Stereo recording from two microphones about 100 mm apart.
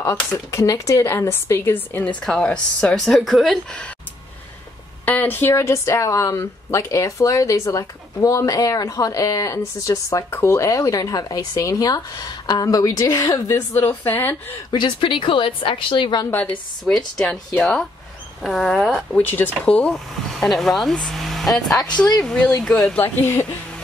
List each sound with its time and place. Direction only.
0.1 s speech: 25° left (ahead or behind); by 3.5 s centre (ahead or behind)
5.0 s speech: 15° left (ahead or behind)
14.7 s a woman's voice: 55° left (ahead or behind)
16.3 s speech: 15° left (ahead or behind)
18.4 s speech: centre (ahead or behind)
19.1 s speech: 20° left (ahead or behind)
19.9 s speech: centre (ahead or behind)
22.9 s speech: 20° left (ahead or behind)